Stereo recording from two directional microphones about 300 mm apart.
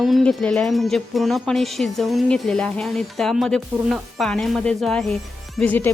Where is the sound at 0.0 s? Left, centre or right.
Centre.